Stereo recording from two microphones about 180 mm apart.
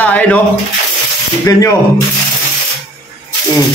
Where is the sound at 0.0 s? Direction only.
10° left (ahead or behind).